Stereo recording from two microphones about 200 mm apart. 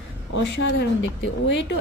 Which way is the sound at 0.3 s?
60° left (ahead or behind).